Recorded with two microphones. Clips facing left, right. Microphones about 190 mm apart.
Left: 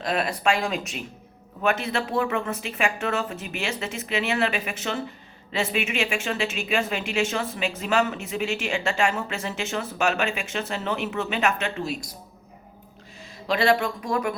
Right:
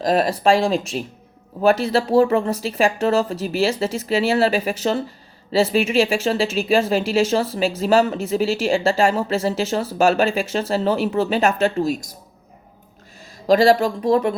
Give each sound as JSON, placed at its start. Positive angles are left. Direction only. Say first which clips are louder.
{"t": 0.0, "sound": "speech", "louder": "right 7 dB", "side_deg": -35}
{"t": 13.5, "sound": "speech", "louder": "right 8 dB", "side_deg": -40}